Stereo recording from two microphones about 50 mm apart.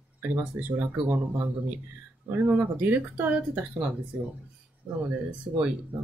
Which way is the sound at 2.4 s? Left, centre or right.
Right.